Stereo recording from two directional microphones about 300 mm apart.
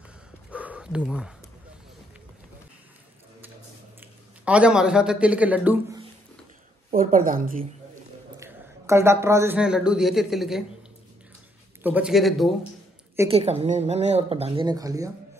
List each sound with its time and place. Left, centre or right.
0.5 s dog: centre
4.0 s speech: centre
6.9 s speech: right
8.4 s speech: centre
11.8 s a woman's voice: centre
13.4 s speech: centre